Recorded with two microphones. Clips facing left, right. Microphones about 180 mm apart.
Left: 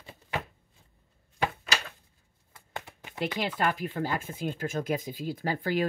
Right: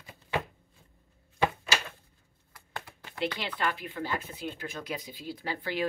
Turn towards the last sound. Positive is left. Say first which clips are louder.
# left 4 dB
turn(degrees=45)  # may be behind; listen again after turning